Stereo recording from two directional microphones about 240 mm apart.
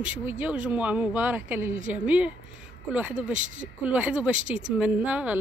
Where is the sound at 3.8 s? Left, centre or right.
Centre.